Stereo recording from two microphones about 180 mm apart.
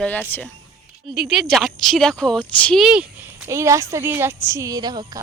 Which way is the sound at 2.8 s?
5° right (ahead or behind).